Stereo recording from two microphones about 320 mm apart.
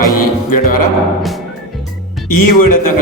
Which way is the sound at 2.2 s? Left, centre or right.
Left.